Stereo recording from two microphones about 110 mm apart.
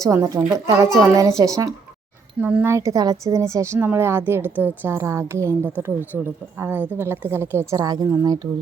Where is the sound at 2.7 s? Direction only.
30° right (ahead or behind).